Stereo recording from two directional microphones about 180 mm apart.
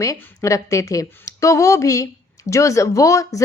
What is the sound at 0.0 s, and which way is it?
A woman's voice, 15° left (ahead or behind).